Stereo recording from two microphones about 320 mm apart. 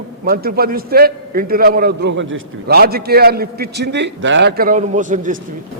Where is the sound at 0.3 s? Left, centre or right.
Right.